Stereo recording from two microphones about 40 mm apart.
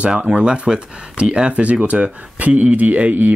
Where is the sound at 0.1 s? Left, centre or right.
Centre.